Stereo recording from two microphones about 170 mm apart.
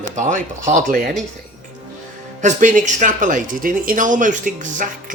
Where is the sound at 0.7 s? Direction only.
50° right (ahead or behind).